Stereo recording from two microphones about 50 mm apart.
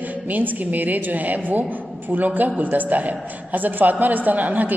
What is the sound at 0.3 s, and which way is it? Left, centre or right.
A woman's voice, right.